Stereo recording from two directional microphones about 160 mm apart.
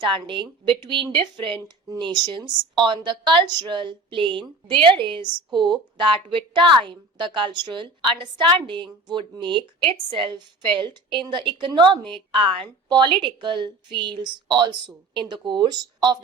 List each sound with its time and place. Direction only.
0.0 s a woman's voice: 30° right (ahead or behind)